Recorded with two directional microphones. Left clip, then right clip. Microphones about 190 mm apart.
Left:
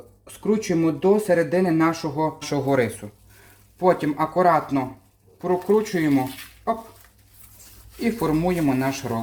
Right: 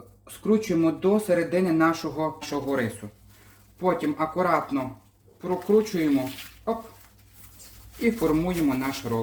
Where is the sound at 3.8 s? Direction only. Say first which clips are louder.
Left 5 dB; 60° left (ahead or behind).